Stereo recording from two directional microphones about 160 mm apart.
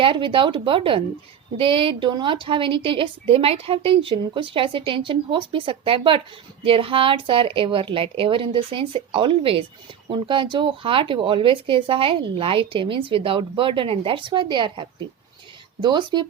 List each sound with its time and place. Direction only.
0.0 s a woman's voice: 30° right (ahead or behind)